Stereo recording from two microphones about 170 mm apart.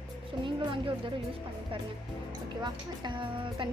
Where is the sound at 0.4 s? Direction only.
30° right (ahead or behind).